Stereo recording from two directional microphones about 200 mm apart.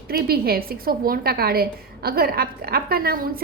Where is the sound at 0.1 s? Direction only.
50° right (ahead or behind).